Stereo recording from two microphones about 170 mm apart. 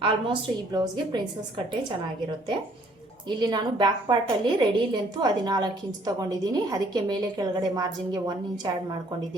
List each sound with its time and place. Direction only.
0.0 s a woman's voice: 25° right (ahead or behind)
3.2 s a woman's voice: 25° right (ahead or behind)